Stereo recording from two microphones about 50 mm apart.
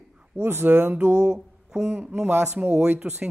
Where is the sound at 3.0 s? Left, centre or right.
Right.